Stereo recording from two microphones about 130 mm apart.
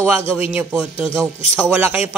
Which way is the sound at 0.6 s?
15° right (ahead or behind).